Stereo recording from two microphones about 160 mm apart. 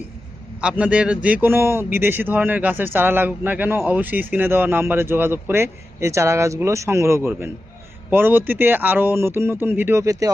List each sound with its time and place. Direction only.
0.6 s speech: 5° right (ahead or behind)